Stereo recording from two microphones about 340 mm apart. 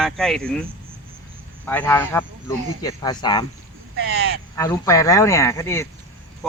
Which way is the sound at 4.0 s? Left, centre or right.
Right.